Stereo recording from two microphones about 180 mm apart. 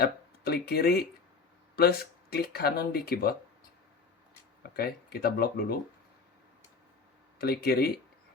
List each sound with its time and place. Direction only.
0.0 s speech: 60° left (ahead or behind)
4.8 s speech: 55° left (ahead or behind)
7.3 s speech: 60° left (ahead or behind)